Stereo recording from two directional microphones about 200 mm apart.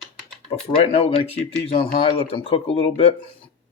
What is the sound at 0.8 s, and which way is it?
Speech, 30° left (ahead or behind).